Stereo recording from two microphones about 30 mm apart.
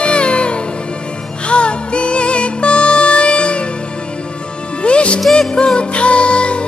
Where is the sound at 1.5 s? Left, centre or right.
Left.